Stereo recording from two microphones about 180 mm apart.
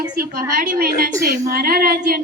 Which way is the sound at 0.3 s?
50° right (ahead or behind).